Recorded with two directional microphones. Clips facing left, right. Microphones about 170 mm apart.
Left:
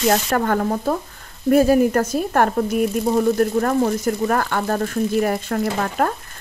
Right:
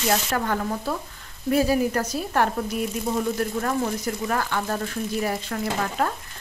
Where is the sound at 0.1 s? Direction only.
50° left (ahead or behind).